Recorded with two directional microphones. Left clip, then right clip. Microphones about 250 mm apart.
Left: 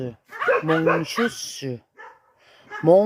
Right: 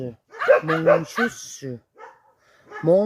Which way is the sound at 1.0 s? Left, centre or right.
Right.